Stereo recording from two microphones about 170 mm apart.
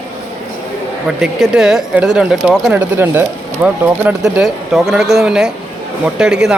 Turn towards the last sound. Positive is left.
turn(degrees=-5)  # may be behind; listen again after turning